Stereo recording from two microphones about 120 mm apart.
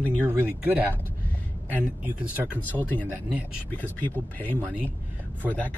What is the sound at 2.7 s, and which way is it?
Speech, 15° left (ahead or behind).